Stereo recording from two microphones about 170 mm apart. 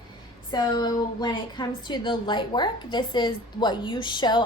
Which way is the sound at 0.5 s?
25° left (ahead or behind).